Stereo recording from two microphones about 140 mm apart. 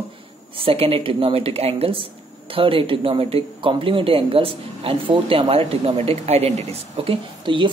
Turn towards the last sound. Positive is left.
turn(degrees=-35)  # may be behind; listen again after turning